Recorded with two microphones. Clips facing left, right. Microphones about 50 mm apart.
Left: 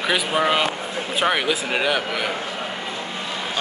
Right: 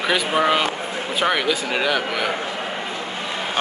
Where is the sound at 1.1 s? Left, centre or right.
Centre.